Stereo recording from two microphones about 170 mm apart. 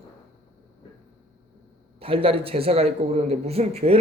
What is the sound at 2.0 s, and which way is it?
A man's voice, 35° right (ahead or behind).